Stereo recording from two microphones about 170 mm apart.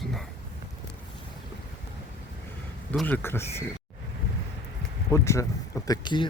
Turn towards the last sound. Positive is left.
turn(degrees=25)  # may be behind; listen again after turning